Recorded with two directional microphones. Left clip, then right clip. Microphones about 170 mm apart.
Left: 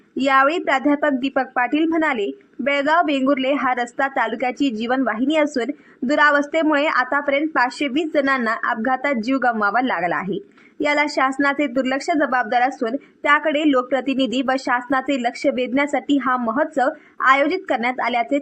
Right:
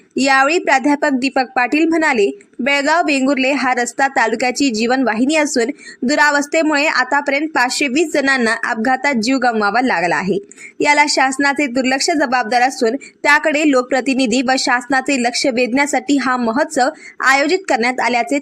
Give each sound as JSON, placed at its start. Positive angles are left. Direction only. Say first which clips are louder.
{"t": 0.2, "sound": "a woman's voice", "louder": "right 3 dB", "side_deg": -35}